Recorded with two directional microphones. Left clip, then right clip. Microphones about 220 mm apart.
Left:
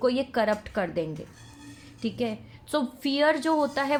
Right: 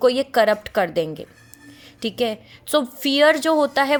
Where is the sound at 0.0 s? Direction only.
30° right (ahead or behind).